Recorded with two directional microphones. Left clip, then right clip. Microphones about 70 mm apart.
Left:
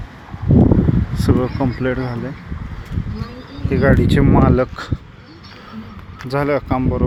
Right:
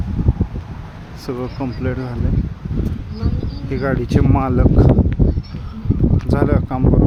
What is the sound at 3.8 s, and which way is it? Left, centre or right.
Speech, left.